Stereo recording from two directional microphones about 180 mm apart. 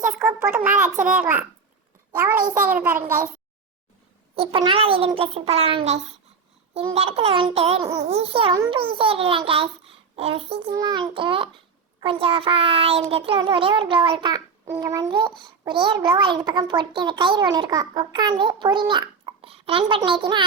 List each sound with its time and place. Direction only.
0.0 s a sound: 10° right (ahead or behind)
1.0 s a child's voice: 10° right (ahead or behind)
2.6 s a child's voice: 10° right (ahead or behind)
4.4 s a child's voice: 30° right (ahead or behind)